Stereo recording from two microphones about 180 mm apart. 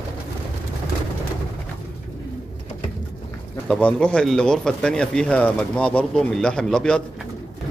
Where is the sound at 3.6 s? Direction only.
5° left (ahead or behind).